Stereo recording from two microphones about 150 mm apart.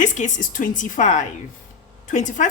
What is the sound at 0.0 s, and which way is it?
A woman's voice, 55° left (ahead or behind).